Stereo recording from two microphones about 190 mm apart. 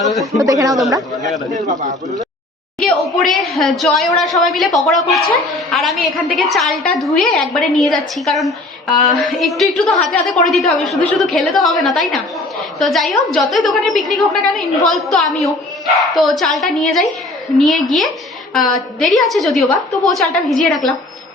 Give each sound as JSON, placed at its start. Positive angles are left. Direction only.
{"t": 0.0, "sound": "a woman's voice", "side_deg": 0}
{"t": 0.3, "sound": "speech", "side_deg": -15}
{"t": 1.5, "sound": "a man's voice", "side_deg": -35}
{"t": 2.8, "sound": "a woman's voice", "side_deg": 0}